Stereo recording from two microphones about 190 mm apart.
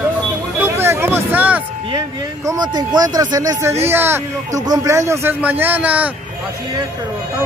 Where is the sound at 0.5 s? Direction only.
10° right (ahead or behind).